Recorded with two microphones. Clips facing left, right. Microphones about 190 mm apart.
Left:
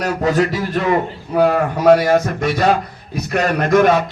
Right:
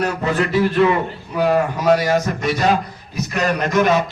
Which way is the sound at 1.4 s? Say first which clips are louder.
Left 2 dB; 55° left (ahead or behind).